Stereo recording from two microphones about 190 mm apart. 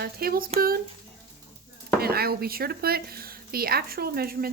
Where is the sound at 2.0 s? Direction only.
55° right (ahead or behind).